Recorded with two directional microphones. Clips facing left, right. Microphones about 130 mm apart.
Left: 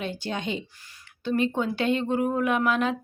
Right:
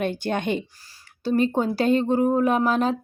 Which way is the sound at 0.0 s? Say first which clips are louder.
Right 6 dB; 55° right (ahead or behind).